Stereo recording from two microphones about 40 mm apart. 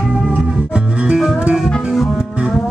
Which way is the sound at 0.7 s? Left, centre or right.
Right.